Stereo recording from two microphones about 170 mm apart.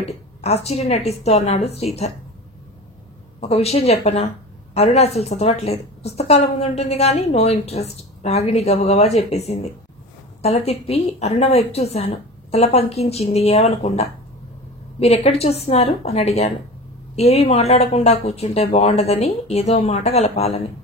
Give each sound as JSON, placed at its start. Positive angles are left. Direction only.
{"t": 0.0, "sound": "a woman's voice", "side_deg": 40}
{"t": 3.3, "sound": "a woman's voice", "side_deg": 35}